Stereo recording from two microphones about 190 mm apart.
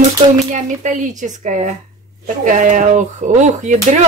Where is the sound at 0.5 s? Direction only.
40° right (ahead or behind).